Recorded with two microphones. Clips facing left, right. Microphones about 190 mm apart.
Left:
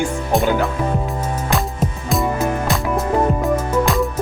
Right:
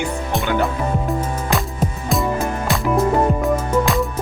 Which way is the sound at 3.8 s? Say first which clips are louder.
Left 1 dB; centre (ahead or behind).